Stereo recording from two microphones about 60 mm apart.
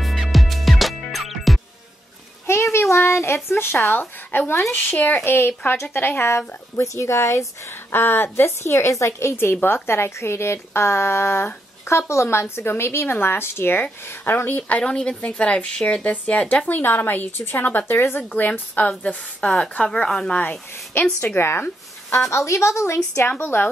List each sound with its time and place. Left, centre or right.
0.0 s music: centre
2.7 s a sound: left
3.9 s speech: left
7.9 s speech: left
8.5 s speech: left
14.8 s a woman's voice: centre; by 18.2 s left
18.3 s a woman's voice: left; by 20.3 s centre
20.3 s speech: left
21.4 s speech: left
22.3 s a woman's voice: left
23.4 s speech: left